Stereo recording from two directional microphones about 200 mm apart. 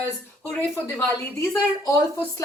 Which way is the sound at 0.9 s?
15° left (ahead or behind).